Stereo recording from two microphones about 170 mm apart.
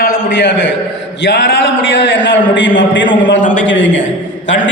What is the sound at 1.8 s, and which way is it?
A man's voice, 90° left.